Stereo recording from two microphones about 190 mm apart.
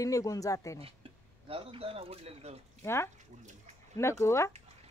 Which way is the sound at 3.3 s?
40° right (ahead or behind).